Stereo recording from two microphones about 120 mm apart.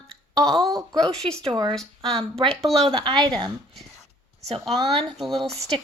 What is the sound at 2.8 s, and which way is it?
Speech, 45° right (ahead or behind).